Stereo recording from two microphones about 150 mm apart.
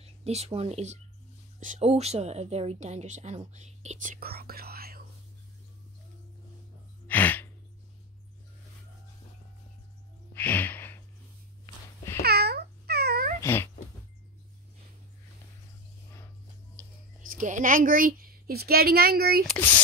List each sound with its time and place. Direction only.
0.0 s a woman's voice: 45° right (ahead or behind); by 5.0 s 90° right
7.1 s gasp: 10° left (ahead or behind)
10.3 s a sound: 10° left (ahead or behind)
12.2 s babbling: 90° right
13.4 s a sound: 15° left (ahead or behind)
17.4 s a woman's voice: 60° right (ahead or behind); by 19.4 s 90° right
19.5 s speech: 10° left (ahead or behind)